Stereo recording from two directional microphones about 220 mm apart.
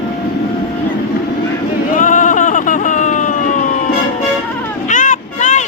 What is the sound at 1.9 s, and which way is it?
Sheep, 35° left (ahead or behind).